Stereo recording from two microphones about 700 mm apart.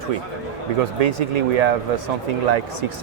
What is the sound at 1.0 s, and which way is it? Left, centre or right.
Speech, right.